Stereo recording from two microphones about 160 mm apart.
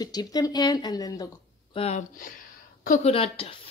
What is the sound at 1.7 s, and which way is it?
Speech, 40° left (ahead or behind).